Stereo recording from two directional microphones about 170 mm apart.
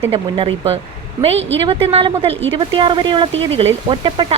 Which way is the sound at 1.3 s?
90° right.